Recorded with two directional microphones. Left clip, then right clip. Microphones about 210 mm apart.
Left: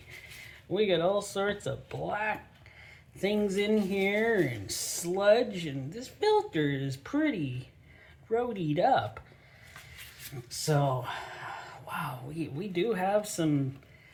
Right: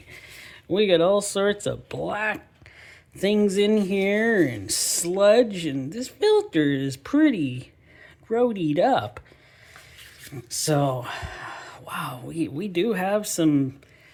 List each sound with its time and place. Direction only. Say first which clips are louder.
0.4 s speech: right 7 dB; 45° right (ahead or behind)
10.5 s speech: right 6 dB; 45° right (ahead or behind)